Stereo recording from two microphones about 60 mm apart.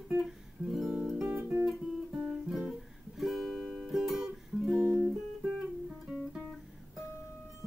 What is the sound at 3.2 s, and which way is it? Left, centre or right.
Music, centre.